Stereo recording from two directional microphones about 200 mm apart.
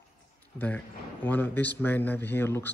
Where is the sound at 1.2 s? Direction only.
10° left (ahead or behind).